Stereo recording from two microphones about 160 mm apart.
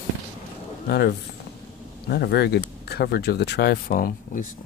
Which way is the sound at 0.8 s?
80° left.